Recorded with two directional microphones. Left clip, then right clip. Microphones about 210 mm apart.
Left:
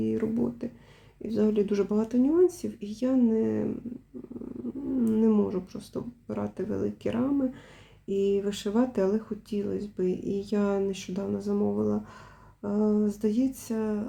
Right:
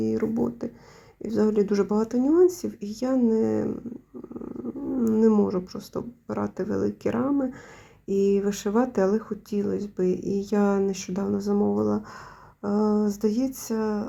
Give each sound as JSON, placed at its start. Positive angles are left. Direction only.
{"t": 0.0, "sound": "speech", "side_deg": -20}
{"t": 5.0, "sound": "speech", "side_deg": -20}